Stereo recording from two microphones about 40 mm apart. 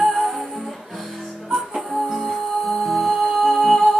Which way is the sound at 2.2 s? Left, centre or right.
Centre.